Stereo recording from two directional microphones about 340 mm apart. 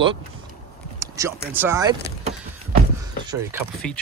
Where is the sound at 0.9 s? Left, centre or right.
Centre.